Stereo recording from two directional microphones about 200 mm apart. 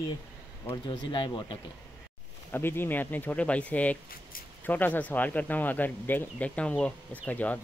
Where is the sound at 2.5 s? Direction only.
10° left (ahead or behind).